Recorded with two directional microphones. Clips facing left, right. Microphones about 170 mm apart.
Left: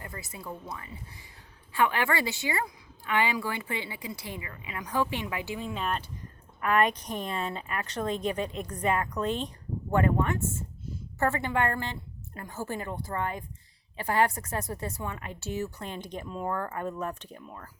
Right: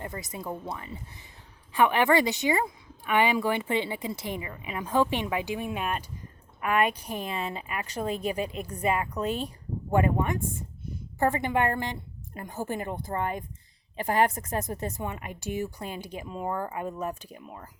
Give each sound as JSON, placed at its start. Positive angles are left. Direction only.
{"t": 0.0, "sound": "a woman's voice", "side_deg": -20}